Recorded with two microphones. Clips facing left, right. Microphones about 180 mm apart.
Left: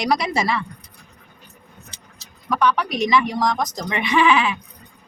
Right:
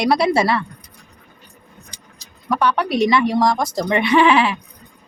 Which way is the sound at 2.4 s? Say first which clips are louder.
Right 1 dB; 30° right (ahead or behind).